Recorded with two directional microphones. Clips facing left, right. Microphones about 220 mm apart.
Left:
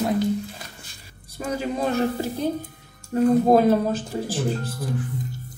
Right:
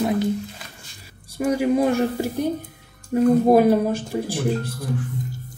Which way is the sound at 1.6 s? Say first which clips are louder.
Right 3 dB; 15° right (ahead or behind).